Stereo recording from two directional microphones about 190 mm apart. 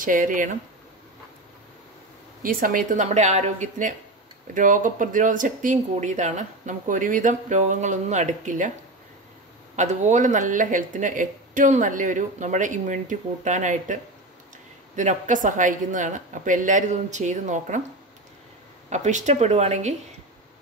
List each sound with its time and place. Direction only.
0.0 s speech: 45° right (ahead or behind)
2.4 s speech: 45° right (ahead or behind)
9.8 s speech: 40° right (ahead or behind)
15.0 s speech: 40° right (ahead or behind)
18.9 s speech: 40° right (ahead or behind)